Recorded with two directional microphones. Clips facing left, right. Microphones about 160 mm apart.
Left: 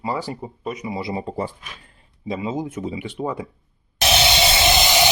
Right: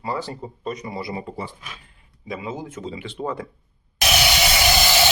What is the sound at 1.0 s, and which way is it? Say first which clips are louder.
Speech: left 3 dB; 20° left (ahead or behind).